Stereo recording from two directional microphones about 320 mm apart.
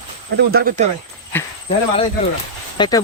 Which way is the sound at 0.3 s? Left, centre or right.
Right.